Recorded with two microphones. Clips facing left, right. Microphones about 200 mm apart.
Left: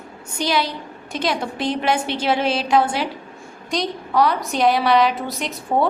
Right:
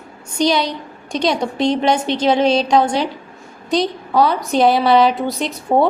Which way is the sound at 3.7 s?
30° right (ahead or behind).